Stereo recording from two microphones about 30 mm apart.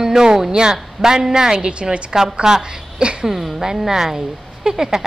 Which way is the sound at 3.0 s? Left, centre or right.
Right.